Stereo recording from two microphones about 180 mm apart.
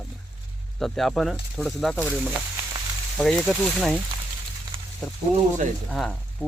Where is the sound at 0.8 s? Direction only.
Centre (ahead or behind).